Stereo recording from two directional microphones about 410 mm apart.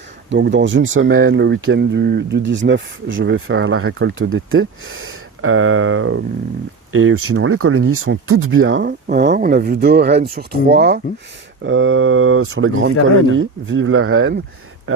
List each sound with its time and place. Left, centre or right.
0.3 s speech: right